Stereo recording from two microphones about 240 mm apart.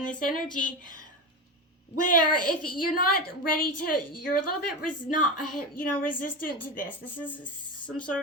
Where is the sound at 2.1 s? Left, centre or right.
Left.